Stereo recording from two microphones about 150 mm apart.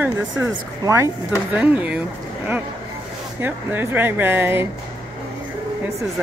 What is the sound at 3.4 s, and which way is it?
Speech, 15° right (ahead or behind).